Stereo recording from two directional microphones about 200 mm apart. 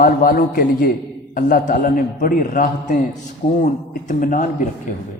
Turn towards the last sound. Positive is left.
turn(degrees=40)  # may be behind; listen again after turning